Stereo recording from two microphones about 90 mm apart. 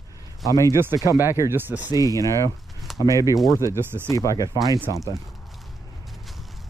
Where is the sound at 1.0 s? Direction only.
30° right (ahead or behind).